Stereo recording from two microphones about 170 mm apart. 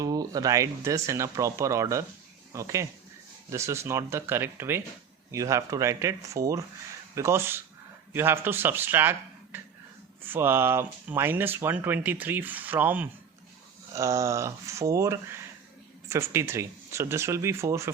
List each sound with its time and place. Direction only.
0.0 s speech: 20° right (ahead or behind)